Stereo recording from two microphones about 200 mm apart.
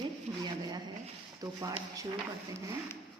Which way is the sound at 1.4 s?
20° right (ahead or behind).